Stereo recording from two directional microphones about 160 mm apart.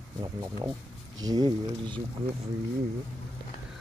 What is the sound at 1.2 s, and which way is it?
Speech, 25° right (ahead or behind).